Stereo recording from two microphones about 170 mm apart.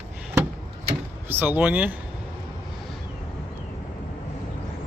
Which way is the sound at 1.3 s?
10° right (ahead or behind).